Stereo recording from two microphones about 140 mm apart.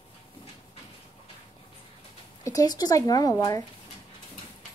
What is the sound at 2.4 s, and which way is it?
Speech, 25° left (ahead or behind).